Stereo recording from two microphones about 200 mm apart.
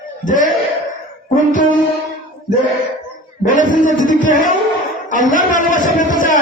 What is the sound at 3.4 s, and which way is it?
A man's voice, 40° left (ahead or behind).